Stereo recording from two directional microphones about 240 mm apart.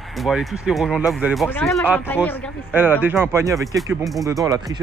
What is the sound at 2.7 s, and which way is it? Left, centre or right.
Speech, centre.